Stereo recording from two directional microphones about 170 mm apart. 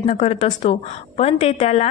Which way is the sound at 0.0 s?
40° left (ahead or behind).